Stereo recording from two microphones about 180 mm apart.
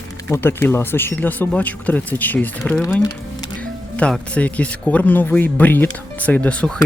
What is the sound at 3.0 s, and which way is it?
Music, 20° left (ahead or behind).